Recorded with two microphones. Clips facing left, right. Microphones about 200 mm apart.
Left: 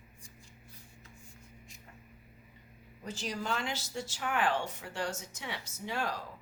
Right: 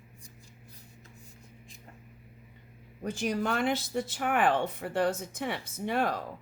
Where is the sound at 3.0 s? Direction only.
55° right (ahead or behind).